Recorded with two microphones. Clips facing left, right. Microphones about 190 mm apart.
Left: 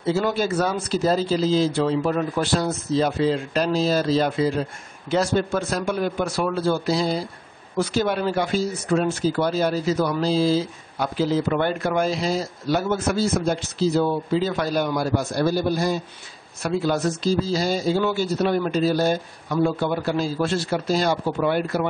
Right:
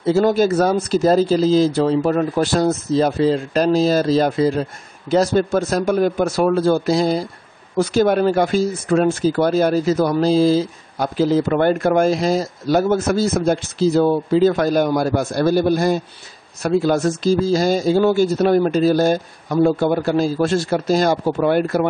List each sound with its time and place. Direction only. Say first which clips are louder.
0.0 s speech: right 7 dB; 45° right (ahead or behind)